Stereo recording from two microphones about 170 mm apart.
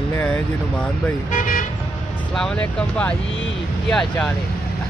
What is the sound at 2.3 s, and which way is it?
Speech, 5° left (ahead or behind).